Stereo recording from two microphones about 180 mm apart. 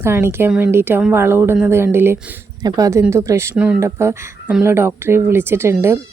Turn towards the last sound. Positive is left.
turn(degrees=-15)  # may be behind; listen again after turning